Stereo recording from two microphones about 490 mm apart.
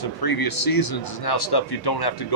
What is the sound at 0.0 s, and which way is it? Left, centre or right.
A man's voice, left.